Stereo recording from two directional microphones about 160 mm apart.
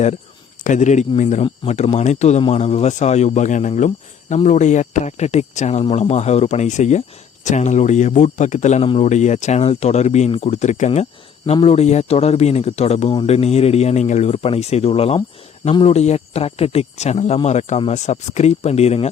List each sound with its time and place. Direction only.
0.6 s speech: 50° left (ahead or behind)